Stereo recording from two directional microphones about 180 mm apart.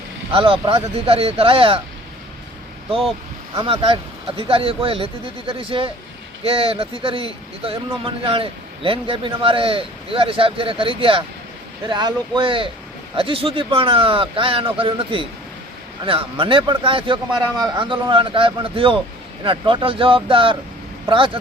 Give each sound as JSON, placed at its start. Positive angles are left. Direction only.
{"t": 0.3, "sound": "speech", "side_deg": -30}
{"t": 3.5, "sound": "speech", "side_deg": -25}